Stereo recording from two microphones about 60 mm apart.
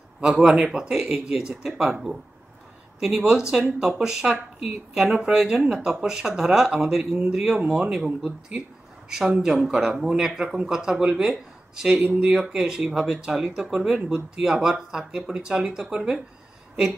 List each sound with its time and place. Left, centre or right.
0.4 s speech: centre
9.4 s speech: centre
12.0 s speech: centre